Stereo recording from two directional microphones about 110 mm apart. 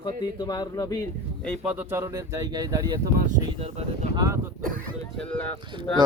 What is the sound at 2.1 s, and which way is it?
Speech, 30° right (ahead or behind).